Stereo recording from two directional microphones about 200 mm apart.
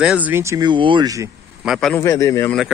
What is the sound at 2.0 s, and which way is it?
Speech, 15° left (ahead or behind).